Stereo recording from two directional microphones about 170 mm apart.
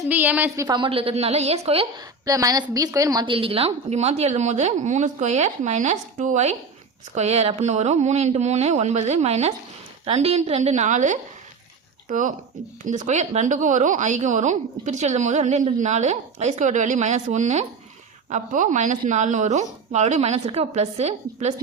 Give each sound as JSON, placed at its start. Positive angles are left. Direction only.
{"t": 0.1, "sound": "speech", "side_deg": -10}
{"t": 2.2, "sound": "a woman's voice", "side_deg": -20}
{"t": 3.3, "sound": "a woman's voice", "side_deg": -35}